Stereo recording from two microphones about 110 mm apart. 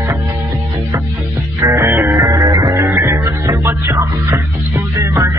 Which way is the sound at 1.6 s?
25° right (ahead or behind).